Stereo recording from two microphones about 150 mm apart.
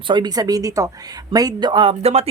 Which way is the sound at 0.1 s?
25° right (ahead or behind).